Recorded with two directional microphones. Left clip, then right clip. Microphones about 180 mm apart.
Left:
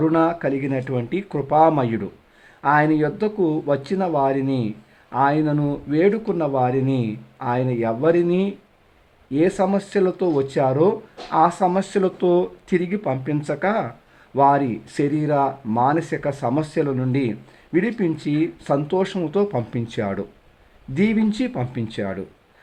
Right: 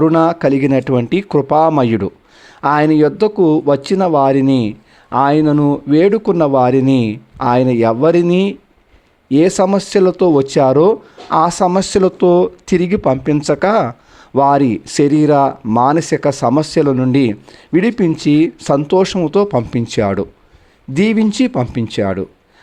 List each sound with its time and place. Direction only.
0.0 s speech: 40° right (ahead or behind)